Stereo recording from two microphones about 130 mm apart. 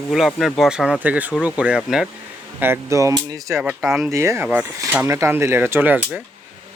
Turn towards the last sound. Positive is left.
turn(degrees=-15)  # may be behind; listen again after turning